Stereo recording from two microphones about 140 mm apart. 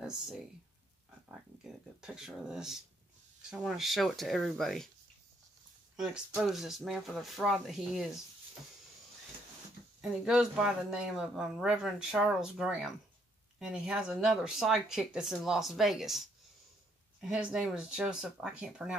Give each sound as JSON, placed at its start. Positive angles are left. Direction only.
{"t": 0.0, "sound": "a sound", "side_deg": -5}
{"t": 3.4, "sound": "speech", "side_deg": -5}
{"t": 5.9, "sound": "speech", "side_deg": -5}
{"t": 10.0, "sound": "speech", "side_deg": 0}